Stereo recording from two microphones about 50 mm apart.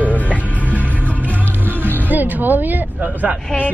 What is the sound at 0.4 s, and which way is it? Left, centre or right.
Music, right.